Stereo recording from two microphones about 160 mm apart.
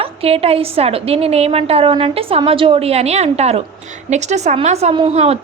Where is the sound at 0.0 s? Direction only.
35° right (ahead or behind).